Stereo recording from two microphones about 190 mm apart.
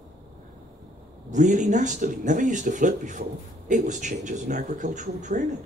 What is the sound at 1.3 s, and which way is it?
Speech, 40° right (ahead or behind).